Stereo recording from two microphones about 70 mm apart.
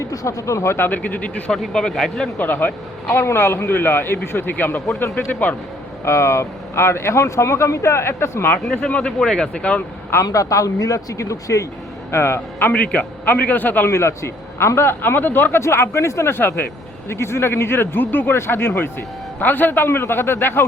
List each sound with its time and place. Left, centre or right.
0.0 s speech: left
0.9 s a man's voice: left
1.5 s speech: centre
2.4 s speech: left
4.9 s speech: left
5.3 s a man's voice: left
6.1 s speech: left
8.9 s speech: centre
10.2 s speech: left
12.1 s speech: left
12.7 s a man's voice: left
13.9 s speech: left